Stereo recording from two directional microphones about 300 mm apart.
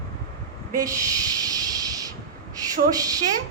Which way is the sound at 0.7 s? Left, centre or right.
Centre.